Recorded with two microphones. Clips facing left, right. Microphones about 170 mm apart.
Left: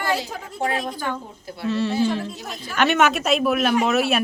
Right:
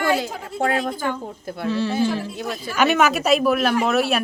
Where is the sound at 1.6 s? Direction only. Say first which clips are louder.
Even; centre (ahead or behind).